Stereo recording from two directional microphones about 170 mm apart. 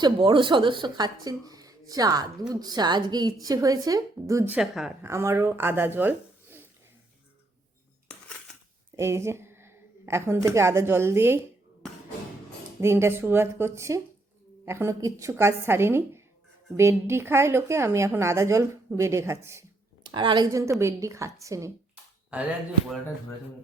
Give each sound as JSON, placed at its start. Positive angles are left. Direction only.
{"t": 0.0, "sound": "a woman's voice", "side_deg": -30}
{"t": 4.5, "sound": "a woman's voice", "side_deg": 0}
{"t": 5.0, "sound": "speech", "side_deg": -15}
{"t": 9.0, "sound": "speech", "side_deg": -15}
{"t": 12.8, "sound": "a woman's voice", "side_deg": -15}
{"t": 20.1, "sound": "a woman's voice", "side_deg": -25}